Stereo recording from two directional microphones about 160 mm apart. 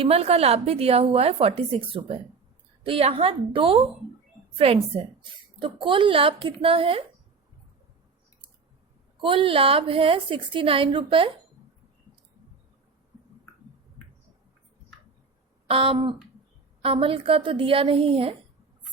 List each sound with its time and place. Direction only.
0.0 s a woman's voice: 40° right (ahead or behind)
9.2 s a woman's voice: 35° right (ahead or behind)
15.6 s a woman's voice: 35° right (ahead or behind)